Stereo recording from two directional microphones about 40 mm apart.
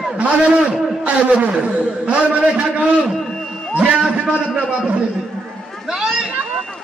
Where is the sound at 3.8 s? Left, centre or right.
Right.